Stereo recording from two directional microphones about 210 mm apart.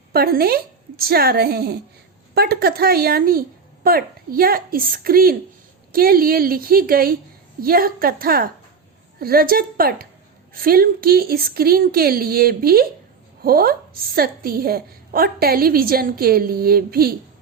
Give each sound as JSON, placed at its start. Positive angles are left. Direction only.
{"t": 0.1, "sound": "a woman's voice", "side_deg": -45}